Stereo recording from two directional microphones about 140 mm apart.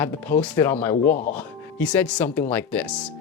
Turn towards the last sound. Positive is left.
turn(degrees=10)  # may be behind; listen again after turning